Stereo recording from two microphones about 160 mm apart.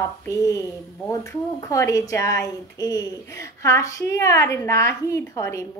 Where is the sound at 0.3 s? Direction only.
20° left (ahead or behind).